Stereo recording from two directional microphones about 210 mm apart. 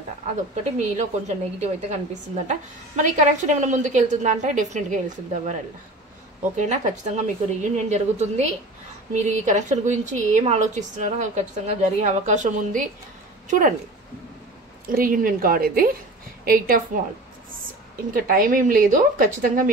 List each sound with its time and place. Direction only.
0.7 s a woman's voice: 35° right (ahead or behind)
3.0 s a woman's voice: 35° right (ahead or behind)
14.9 s a woman's voice: 40° right (ahead or behind)
18.1 s a woman's voice: 40° right (ahead or behind)